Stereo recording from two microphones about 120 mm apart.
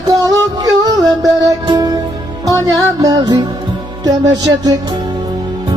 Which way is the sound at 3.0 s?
35° right (ahead or behind).